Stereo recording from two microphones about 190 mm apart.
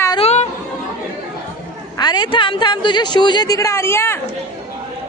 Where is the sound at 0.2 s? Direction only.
35° left (ahead or behind).